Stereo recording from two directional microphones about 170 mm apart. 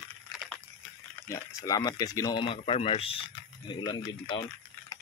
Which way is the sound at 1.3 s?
20° left (ahead or behind).